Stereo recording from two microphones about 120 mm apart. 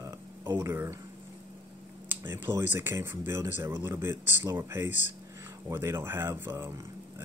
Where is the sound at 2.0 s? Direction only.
20° right (ahead or behind).